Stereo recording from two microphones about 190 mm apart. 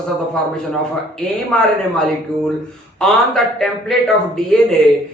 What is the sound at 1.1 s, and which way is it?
Speech, 5° left (ahead or behind).